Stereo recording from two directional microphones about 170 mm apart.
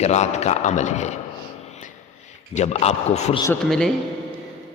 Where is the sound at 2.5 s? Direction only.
40° left (ahead or behind).